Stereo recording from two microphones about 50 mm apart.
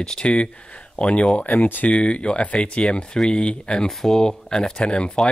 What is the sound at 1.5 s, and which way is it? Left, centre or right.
Speech, left.